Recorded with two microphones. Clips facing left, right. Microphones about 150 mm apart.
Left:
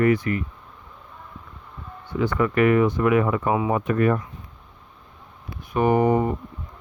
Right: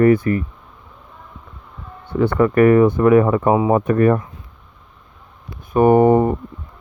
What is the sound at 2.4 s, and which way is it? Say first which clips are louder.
Speech: right 7 dB; 40° right (ahead or behind).